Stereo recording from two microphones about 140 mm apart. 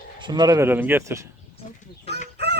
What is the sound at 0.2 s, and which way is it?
Speech, 30° right (ahead or behind).